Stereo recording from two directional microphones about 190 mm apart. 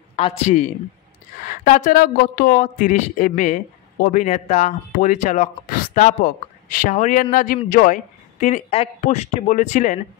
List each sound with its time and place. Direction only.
0.1 s a man's voice: 35° left (ahead or behind)